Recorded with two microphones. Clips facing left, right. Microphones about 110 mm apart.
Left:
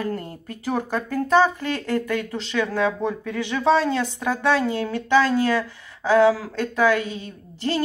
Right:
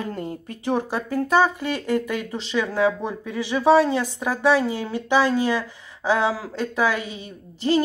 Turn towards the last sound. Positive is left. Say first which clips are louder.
# right 4 dB
turn(degrees=-15)  # may be behind; listen again after turning